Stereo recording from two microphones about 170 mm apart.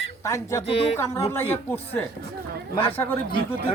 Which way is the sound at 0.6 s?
35° left (ahead or behind).